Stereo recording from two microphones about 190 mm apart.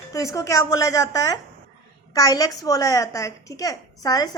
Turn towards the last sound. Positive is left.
turn(degrees=20)  # may be behind; listen again after turning